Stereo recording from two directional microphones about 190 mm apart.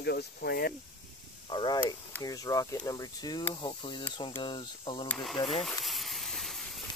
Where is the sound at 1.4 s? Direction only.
25° left (ahead or behind).